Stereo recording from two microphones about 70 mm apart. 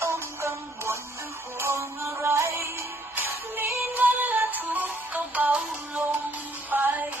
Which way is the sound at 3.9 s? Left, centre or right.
Right.